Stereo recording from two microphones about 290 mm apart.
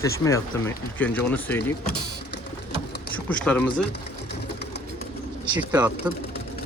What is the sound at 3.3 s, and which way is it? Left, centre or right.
Speech, centre.